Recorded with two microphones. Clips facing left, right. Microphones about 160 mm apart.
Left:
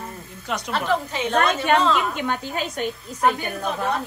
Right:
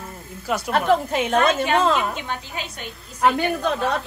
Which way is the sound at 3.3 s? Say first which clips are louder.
Right 5 dB; 85° right.